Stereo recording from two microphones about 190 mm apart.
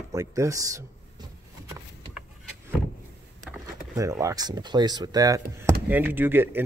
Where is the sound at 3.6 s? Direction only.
15° right (ahead or behind).